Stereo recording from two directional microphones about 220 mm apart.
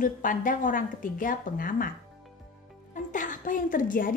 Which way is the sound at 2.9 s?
35° left (ahead or behind).